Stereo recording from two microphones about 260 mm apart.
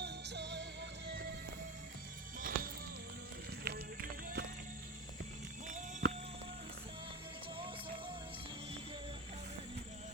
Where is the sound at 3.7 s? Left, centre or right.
Right.